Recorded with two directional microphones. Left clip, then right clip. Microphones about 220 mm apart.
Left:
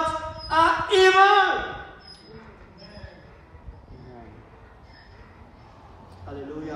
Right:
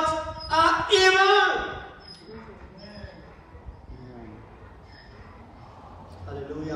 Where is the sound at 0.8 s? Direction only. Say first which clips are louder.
Left 1 dB; 25° left (ahead or behind).